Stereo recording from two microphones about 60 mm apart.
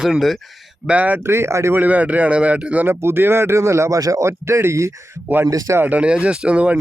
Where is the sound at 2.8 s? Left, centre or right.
Right.